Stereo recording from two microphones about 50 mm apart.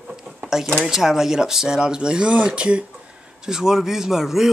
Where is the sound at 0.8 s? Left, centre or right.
Centre.